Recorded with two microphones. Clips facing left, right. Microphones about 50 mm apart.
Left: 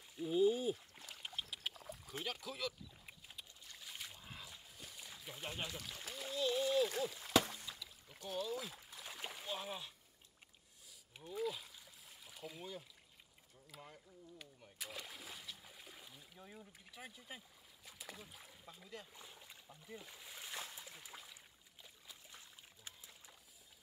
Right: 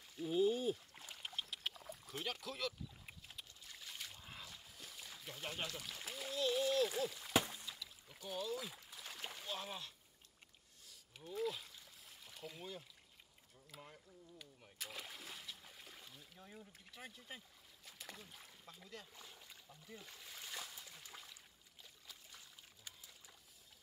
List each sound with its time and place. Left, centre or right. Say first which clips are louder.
0.1 s rowboat: left 2 dB; centre
5.8 s speech: even; centre
7.8 s rowboat: even; centre
8.2 s speech: left 1 dB; centre
8.9 s splash: left 1 dB; centre
11.2 s stream: even; centre
13.7 s speech: left 1 dB; centre
14.6 s a sound: even; centre
17.8 s splash: left 1 dB; centre
20.7 s a sound: left 2 dB; centre
22.8 s pig: left 1 dB; left